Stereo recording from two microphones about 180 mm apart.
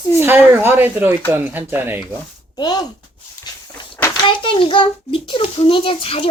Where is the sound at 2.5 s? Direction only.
20° left (ahead or behind).